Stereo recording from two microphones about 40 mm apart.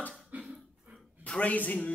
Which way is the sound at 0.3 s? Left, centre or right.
Right.